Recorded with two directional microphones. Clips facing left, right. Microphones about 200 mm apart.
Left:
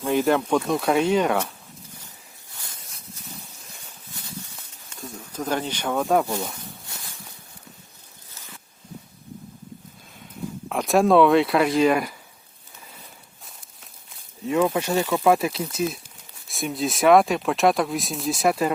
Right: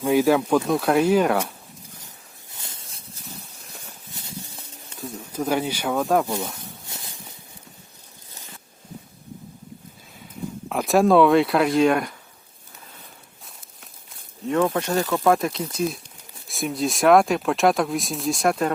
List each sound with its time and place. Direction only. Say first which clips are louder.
0.1 s speech: right 2 dB; 5° right (ahead or behind)
2.6 s a sound: right 2 dB; 25° right (ahead or behind)
4.9 s speech: right 4 dB; 10° right (ahead or behind)
10.7 s speech: right 1 dB; centre (ahead or behind)
14.4 s speech: even; 5° left (ahead or behind)